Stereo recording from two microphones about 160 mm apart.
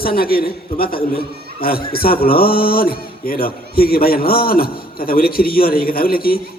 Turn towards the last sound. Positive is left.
turn(degrees=70)  # may be behind; listen again after turning